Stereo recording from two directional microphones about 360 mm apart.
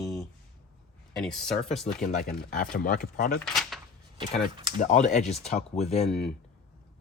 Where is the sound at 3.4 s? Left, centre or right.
Centre.